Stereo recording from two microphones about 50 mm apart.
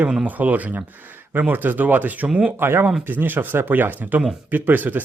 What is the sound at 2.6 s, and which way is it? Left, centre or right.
Speech, right.